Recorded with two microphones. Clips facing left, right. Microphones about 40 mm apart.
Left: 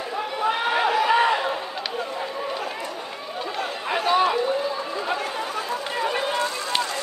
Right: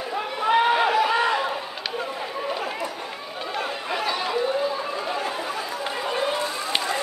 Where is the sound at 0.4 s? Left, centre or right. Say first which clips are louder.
Right 3 dB; centre.